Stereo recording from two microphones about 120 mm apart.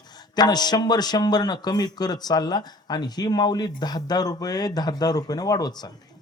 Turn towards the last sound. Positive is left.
turn(degrees=35)  # may be behind; listen again after turning